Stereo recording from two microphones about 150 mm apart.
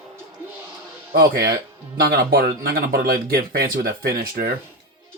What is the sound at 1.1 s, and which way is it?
Speech, 90° right.